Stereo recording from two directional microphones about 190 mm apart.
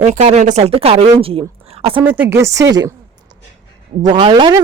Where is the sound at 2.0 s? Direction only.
10° right (ahead or behind).